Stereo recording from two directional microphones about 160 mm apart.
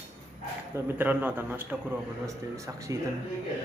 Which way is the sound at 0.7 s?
10° right (ahead or behind).